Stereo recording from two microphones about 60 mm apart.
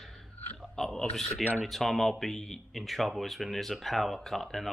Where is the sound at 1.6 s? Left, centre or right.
Centre.